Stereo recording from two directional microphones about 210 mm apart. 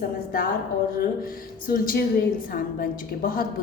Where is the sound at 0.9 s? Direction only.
45° left (ahead or behind).